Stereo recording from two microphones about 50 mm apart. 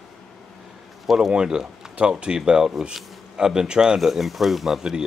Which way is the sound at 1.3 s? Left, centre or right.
Centre.